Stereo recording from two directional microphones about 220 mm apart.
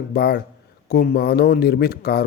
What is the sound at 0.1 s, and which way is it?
Speech, 45° left (ahead or behind).